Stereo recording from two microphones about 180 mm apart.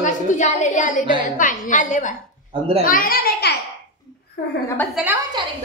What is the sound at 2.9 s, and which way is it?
Speech, 50° left (ahead or behind).